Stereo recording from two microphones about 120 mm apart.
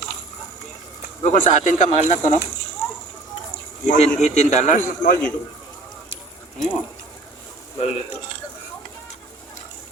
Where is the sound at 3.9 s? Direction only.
65° left (ahead or behind).